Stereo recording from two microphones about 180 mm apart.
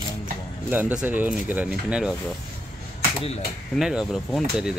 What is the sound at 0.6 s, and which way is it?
Speech, 10° right (ahead or behind).